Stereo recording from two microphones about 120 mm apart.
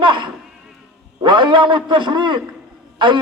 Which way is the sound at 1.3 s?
40° right (ahead or behind).